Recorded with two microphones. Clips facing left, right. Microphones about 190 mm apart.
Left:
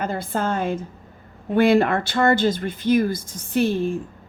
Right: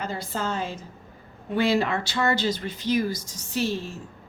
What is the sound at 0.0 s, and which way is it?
A woman's voice, 55° left (ahead or behind).